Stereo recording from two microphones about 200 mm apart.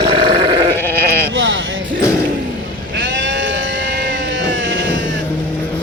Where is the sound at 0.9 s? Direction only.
60° right (ahead or behind).